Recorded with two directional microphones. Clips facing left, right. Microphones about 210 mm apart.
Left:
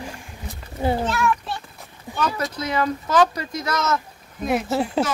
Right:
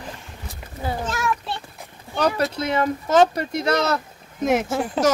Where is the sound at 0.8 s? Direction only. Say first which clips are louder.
Left 6 dB; 25° left (ahead or behind).